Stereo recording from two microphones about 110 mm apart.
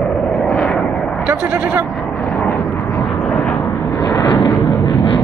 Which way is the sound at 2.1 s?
15° left (ahead or behind).